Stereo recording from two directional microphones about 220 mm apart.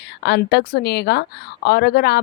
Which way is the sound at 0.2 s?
50° left (ahead or behind).